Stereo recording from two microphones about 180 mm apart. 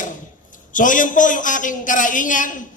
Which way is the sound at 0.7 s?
45° left (ahead or behind).